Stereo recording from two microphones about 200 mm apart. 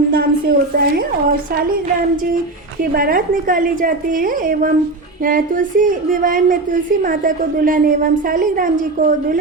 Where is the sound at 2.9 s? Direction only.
45° right (ahead or behind).